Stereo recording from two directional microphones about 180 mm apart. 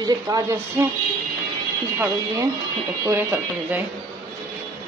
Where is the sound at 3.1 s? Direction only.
10° right (ahead or behind).